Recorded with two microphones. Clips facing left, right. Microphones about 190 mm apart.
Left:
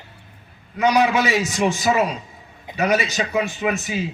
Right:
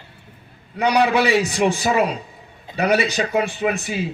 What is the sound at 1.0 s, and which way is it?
Speech, 40° right (ahead or behind).